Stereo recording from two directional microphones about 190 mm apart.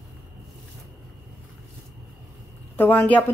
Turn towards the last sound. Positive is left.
turn(degrees=10)  # may be behind; listen again after turning